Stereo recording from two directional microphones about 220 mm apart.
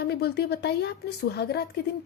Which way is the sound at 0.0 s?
45° left (ahead or behind).